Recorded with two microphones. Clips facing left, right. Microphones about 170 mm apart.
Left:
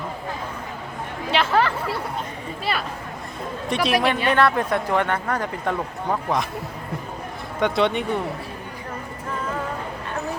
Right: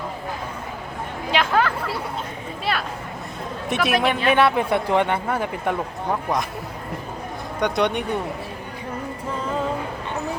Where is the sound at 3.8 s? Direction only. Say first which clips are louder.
Right 1 dB; centre (ahead or behind).